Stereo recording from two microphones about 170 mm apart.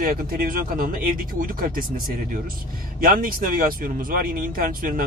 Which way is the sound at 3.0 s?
55° right (ahead or behind).